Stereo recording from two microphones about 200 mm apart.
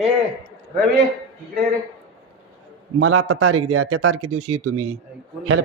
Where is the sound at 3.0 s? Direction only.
90° right.